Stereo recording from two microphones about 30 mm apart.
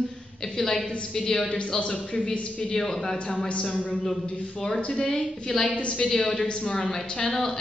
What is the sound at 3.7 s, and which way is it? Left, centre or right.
Speech, left.